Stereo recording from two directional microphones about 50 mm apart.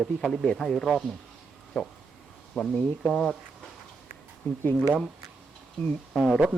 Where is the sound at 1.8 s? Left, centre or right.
Left.